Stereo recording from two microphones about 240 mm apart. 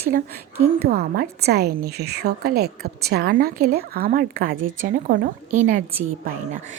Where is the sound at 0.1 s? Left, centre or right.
Right.